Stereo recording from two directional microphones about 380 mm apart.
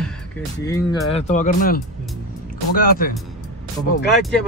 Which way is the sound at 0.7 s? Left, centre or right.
Centre.